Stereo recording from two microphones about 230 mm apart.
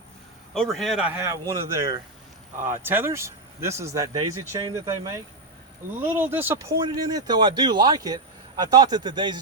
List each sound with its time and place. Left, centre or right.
0.5 s speech: centre